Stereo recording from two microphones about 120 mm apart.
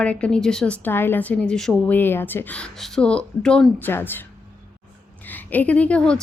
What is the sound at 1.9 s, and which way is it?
A woman's voice, 15° left (ahead or behind).